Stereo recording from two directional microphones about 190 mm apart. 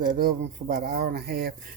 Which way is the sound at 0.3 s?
50° right (ahead or behind).